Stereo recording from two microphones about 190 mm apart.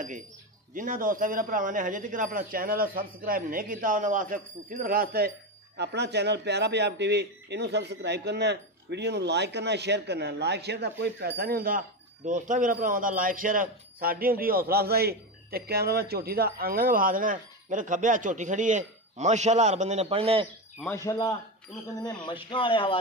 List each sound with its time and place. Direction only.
0.7 s a man's voice: 45° right (ahead or behind)
20.8 s speech: 15° left (ahead or behind)